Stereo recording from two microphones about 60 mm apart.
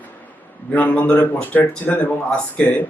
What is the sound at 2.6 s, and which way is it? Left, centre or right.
Speech, centre.